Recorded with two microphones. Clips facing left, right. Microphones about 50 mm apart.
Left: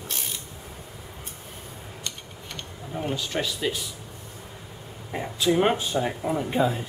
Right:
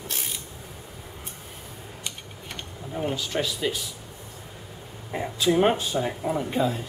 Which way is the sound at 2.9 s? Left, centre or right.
Centre.